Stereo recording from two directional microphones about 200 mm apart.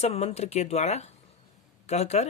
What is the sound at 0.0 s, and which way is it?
Speech, 30° left (ahead or behind).